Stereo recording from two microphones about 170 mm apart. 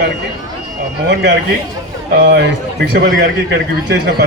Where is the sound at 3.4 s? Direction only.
90° right.